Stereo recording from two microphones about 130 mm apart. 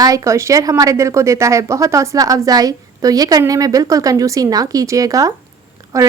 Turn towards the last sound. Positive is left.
turn(degrees=-25)  # may be behind; listen again after turning